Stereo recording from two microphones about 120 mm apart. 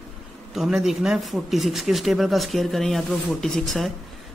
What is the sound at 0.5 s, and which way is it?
Speech, 5° right (ahead or behind).